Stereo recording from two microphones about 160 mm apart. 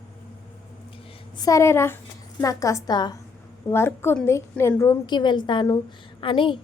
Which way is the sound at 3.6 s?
15° left (ahead or behind).